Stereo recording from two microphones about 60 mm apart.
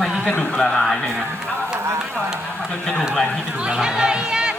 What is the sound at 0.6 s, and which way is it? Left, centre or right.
Speech, centre.